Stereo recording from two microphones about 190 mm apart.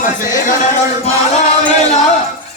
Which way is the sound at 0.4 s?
40° left (ahead or behind).